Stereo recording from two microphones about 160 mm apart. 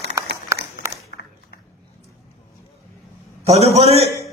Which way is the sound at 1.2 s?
90° left.